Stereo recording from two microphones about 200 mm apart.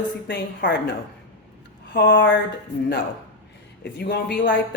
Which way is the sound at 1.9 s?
55° left (ahead or behind).